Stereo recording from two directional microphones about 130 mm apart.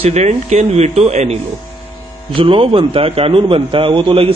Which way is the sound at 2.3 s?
45° right (ahead or behind).